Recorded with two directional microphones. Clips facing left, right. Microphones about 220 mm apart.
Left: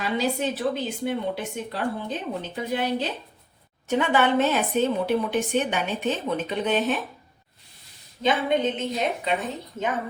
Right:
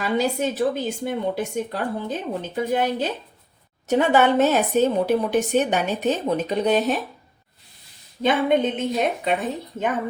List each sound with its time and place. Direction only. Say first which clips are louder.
0.2 s a woman's voice: right 3 dB; 45° right (ahead or behind)
8.2 s a woman's voice: right 3 dB; 55° right (ahead or behind)